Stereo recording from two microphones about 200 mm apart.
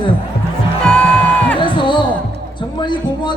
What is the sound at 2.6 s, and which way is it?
Speech, 20° left (ahead or behind).